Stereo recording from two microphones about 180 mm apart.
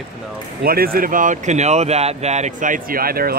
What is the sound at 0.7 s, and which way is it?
Speech, 55° right (ahead or behind).